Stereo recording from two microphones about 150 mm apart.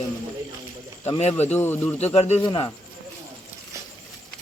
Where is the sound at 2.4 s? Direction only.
30° left (ahead or behind).